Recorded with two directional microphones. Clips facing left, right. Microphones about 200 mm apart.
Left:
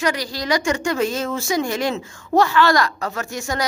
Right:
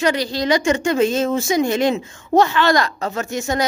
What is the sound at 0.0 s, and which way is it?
Speech, 25° right (ahead or behind).